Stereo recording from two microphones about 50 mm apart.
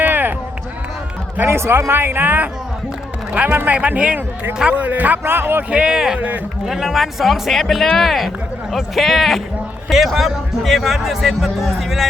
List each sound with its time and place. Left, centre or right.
0.0 s run: right
1.5 s speech: right
5.2 s speech: right
5.7 s speech: centre
6.1 s speech: right
6.7 s speech: centre